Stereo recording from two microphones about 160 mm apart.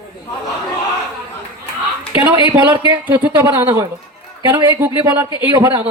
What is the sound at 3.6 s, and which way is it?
Speech, 20° right (ahead or behind).